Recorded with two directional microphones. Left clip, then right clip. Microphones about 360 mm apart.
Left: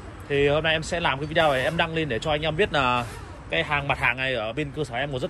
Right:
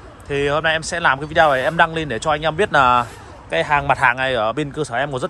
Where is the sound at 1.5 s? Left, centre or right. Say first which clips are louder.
Right 6 dB; right.